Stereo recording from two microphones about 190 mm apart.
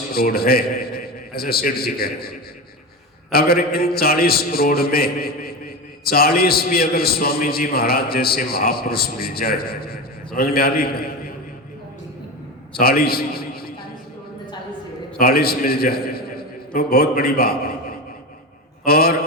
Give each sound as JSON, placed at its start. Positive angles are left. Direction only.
{"t": 0.1, "sound": "a man's voice", "side_deg": 50}
{"t": 3.3, "sound": "a man's voice", "side_deg": 55}
{"t": 12.7, "sound": "a man's voice", "side_deg": 50}
{"t": 15.2, "sound": "a man's voice", "side_deg": 55}
{"t": 18.9, "sound": "a man's voice", "side_deg": 55}